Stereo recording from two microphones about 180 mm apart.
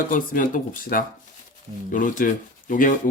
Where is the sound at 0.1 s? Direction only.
50° left (ahead or behind).